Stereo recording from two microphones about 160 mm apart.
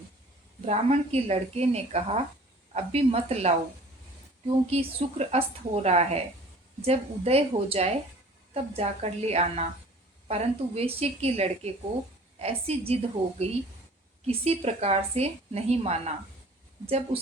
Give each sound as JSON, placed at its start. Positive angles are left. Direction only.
{"t": 0.6, "sound": "a woman's voice", "side_deg": -40}
{"t": 4.7, "sound": "a woman's voice", "side_deg": -40}